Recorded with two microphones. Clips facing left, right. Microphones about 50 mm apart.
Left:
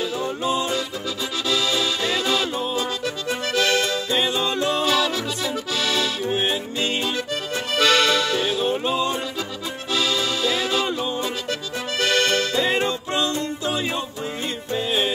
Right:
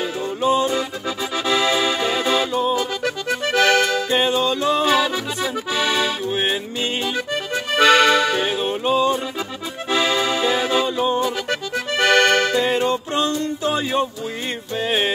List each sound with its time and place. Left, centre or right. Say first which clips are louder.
0.4 s music: right 7 dB; right
4.7 s accordion: right 3 dB; right
9.8 s music: right 4 dB; right
12.0 s accordion: right 5 dB; right
13.7 s music: right 7 dB; right